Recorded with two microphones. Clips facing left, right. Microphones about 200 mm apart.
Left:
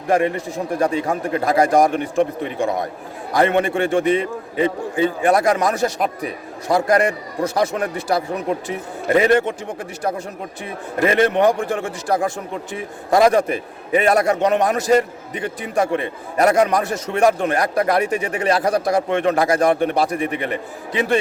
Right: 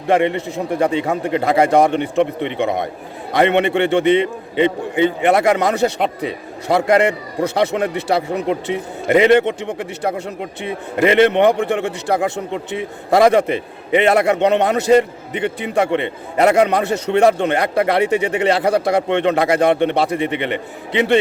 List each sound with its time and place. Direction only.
0.1 s a man's voice: 25° right (ahead or behind)
10.6 s a man's voice: 25° right (ahead or behind)